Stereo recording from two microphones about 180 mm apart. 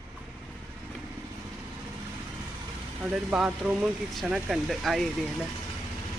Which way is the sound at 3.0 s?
5° right (ahead or behind).